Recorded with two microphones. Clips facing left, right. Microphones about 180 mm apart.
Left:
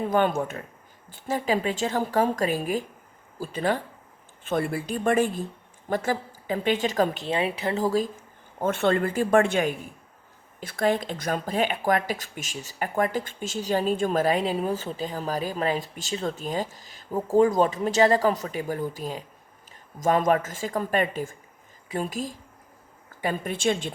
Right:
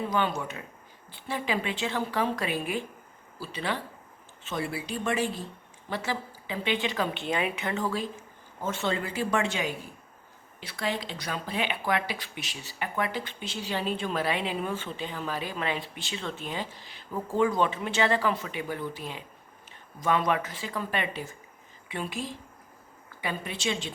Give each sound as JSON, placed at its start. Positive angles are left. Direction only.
{"t": 0.1, "sound": "a woman's voice", "side_deg": 50}
{"t": 8.6, "sound": "a woman's voice", "side_deg": 60}